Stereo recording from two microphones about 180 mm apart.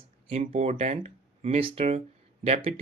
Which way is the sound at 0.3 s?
40° right (ahead or behind).